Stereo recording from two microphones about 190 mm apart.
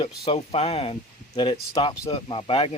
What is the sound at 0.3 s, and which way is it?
Speech, 30° left (ahead or behind).